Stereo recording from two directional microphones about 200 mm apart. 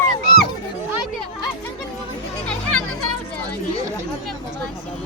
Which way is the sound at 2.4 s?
5° left (ahead or behind).